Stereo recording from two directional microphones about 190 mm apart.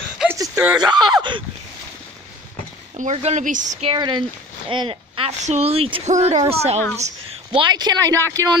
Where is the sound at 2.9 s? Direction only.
35° right (ahead or behind).